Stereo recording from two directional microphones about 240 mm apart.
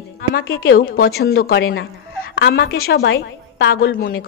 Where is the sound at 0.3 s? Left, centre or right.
Left.